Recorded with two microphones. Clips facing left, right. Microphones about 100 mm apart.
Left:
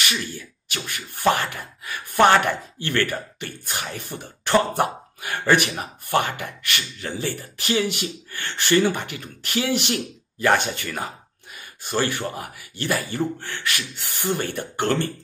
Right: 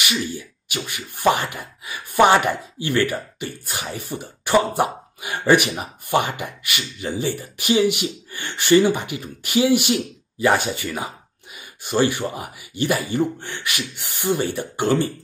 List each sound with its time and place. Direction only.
0.0 s speech: 15° right (ahead or behind)